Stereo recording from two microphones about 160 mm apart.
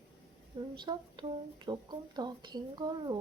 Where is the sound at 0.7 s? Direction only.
25° right (ahead or behind).